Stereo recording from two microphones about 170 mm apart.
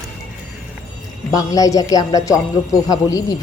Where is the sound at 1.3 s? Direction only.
20° left (ahead or behind).